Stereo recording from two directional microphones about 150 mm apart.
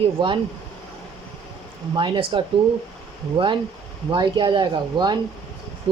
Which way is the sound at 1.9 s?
35° right (ahead or behind).